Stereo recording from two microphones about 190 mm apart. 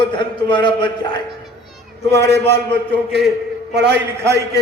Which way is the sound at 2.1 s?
15° left (ahead or behind).